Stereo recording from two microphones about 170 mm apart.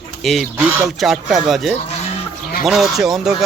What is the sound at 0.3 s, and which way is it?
Speech, centre (ahead or behind).